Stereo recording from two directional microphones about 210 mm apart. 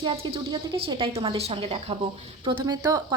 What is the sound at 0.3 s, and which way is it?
A woman's voice, 25° right (ahead or behind).